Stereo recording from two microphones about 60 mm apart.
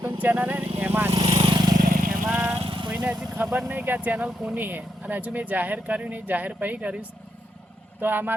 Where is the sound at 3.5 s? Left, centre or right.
Right.